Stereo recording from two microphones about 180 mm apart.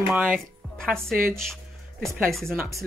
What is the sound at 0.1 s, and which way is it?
Speech, centre (ahead or behind).